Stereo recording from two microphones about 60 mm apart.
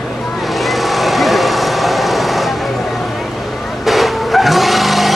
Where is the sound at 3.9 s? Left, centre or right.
Centre.